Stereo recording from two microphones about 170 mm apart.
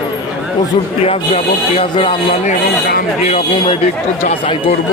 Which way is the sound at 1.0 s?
35° left (ahead or behind).